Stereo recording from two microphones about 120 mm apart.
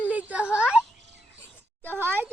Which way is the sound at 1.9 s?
20° right (ahead or behind).